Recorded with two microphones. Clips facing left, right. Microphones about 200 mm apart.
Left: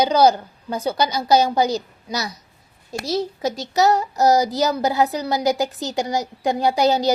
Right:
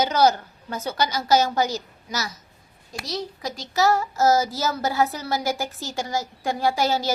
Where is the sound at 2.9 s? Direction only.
25° left (ahead or behind).